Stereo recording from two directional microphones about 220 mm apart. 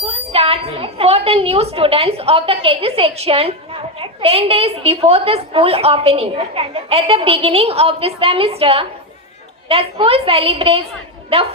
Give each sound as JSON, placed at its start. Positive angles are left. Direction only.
{"t": 0.0, "sound": "a woman's voice", "side_deg": -25}